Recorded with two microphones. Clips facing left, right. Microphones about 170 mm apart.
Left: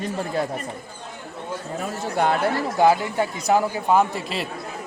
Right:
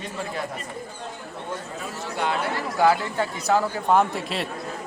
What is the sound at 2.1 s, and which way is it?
Speech, 50° left (ahead or behind).